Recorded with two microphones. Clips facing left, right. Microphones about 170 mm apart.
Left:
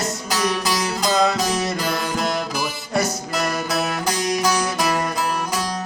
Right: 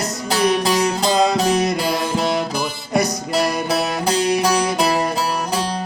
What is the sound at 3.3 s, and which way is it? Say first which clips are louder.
Music: right 4 dB; 30° right (ahead or behind).